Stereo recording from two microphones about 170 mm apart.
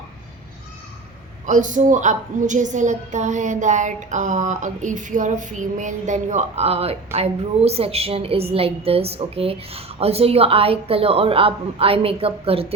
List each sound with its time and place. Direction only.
1.5 s a woman's voice: 45° right (ahead or behind)